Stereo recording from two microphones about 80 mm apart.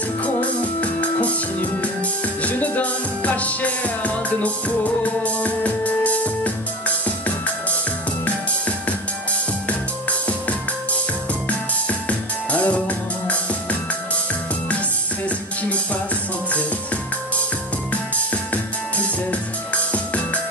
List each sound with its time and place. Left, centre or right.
0.2 s music: centre
2.4 s music: centre
12.1 s music: centre
15.2 s music: centre
18.1 s music: centre